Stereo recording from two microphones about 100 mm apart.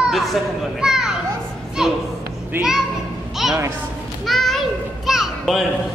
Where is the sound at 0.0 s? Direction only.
Centre (ahead or behind).